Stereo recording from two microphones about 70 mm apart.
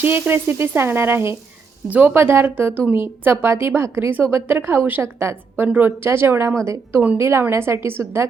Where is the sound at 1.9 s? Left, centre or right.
Right.